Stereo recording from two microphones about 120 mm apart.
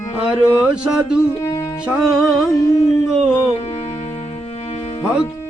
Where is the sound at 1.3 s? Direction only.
25° left (ahead or behind).